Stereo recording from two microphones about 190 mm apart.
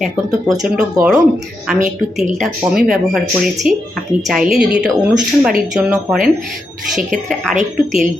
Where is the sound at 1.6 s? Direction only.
Centre (ahead or behind).